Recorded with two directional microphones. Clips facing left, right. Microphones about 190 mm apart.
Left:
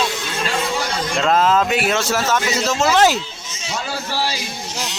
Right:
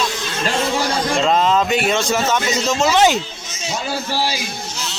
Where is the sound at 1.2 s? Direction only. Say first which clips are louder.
Left 1 dB; centre (ahead or behind).